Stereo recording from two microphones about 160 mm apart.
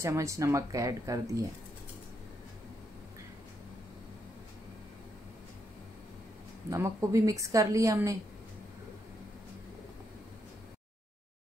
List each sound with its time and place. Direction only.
0.0 s a woman's voice: 20° right (ahead or behind)
6.7 s a woman's voice: 20° right (ahead or behind)